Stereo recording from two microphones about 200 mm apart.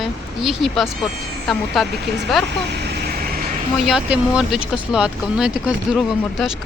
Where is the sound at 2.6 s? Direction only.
55° right (ahead or behind).